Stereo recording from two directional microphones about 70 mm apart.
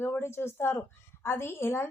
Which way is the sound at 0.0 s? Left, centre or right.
Left.